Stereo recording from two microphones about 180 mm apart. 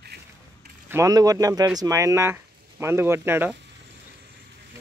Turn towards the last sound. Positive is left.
turn(degrees=-10)  # may be behind; listen again after turning